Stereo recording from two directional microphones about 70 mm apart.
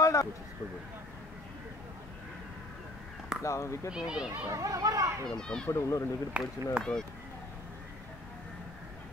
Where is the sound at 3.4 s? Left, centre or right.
Left.